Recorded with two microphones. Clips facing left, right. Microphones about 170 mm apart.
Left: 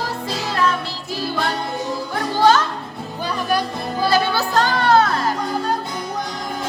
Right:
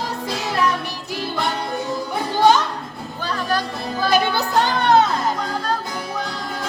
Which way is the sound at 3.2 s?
10° left (ahead or behind).